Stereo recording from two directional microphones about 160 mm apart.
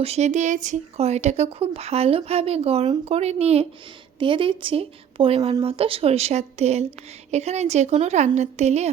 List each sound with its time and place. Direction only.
0.0 s a woman's voice: 40° right (ahead or behind)